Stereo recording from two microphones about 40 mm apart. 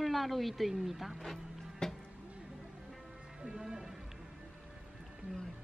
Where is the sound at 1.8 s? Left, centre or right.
Centre.